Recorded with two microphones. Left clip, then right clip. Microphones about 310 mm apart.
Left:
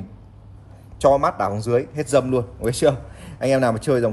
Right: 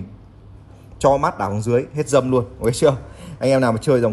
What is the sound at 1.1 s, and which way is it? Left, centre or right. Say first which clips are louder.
Speech: even; right.